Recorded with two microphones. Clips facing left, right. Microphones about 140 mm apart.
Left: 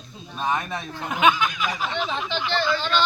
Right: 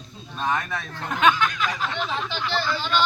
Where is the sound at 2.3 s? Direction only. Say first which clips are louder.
Left 3 dB; 5° right (ahead or behind).